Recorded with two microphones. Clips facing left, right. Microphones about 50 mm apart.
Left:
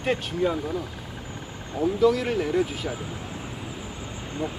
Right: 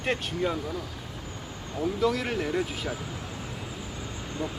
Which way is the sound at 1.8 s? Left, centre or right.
Centre.